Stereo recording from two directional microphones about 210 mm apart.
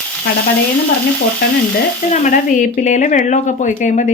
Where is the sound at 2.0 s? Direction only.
40° left (ahead or behind).